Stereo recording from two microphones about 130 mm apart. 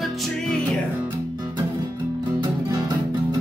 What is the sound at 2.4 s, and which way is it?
Music, 30° right (ahead or behind).